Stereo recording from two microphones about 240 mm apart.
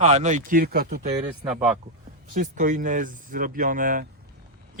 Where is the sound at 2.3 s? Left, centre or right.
Right.